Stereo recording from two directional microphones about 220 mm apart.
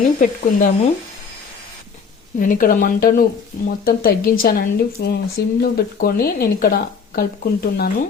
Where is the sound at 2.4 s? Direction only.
40° left (ahead or behind).